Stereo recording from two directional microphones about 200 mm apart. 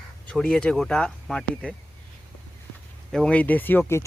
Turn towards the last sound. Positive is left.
turn(degrees=10)  # may be behind; listen again after turning